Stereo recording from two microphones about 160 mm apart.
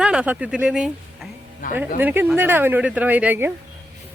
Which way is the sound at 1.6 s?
60° left (ahead or behind).